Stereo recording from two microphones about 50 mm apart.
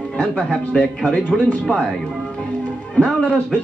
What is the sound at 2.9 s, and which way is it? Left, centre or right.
Speech, left.